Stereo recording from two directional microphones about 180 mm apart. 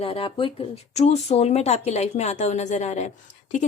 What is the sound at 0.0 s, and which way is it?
A woman's voice, 30° left (ahead or behind).